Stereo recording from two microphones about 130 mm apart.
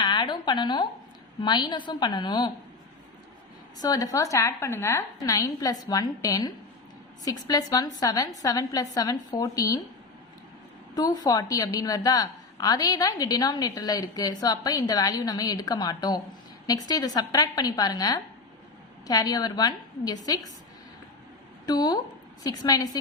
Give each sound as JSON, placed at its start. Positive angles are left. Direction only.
{"t": 0.0, "sound": "a sound", "side_deg": 35}
{"t": 1.4, "sound": "a woman's voice", "side_deg": 35}
{"t": 3.8, "sound": "a woman's voice", "side_deg": 30}
{"t": 10.9, "sound": "a woman's voice", "side_deg": 30}
{"t": 21.7, "sound": "a woman's voice", "side_deg": 30}